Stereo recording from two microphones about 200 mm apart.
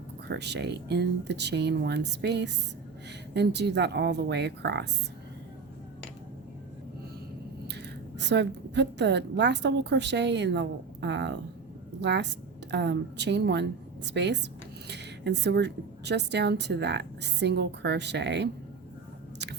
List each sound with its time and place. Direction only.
0.3 s a woman's voice: 55° right (ahead or behind)
8.3 s a woman's voice: 60° right (ahead or behind)